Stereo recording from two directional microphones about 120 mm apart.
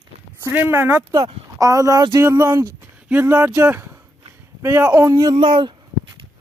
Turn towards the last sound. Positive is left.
turn(degrees=-40)  # may be behind; listen again after turning